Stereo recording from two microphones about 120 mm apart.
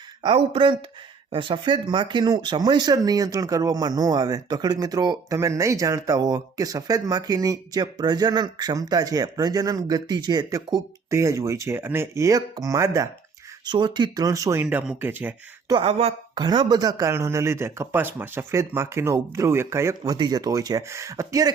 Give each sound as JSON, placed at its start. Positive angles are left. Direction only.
{"t": 0.2, "sound": "speech", "side_deg": -45}
{"t": 13.7, "sound": "speech", "side_deg": -40}
{"t": 14.6, "sound": "speech", "side_deg": -15}
{"t": 15.8, "sound": "speech", "side_deg": -55}
{"t": 16.3, "sound": "speech", "side_deg": -35}
{"t": 20.1, "sound": "speech", "side_deg": -35}